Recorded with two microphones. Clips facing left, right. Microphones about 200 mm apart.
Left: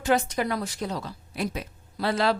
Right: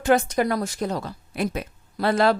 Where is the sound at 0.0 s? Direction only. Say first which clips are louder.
Right 4 dB; 50° right (ahead or behind).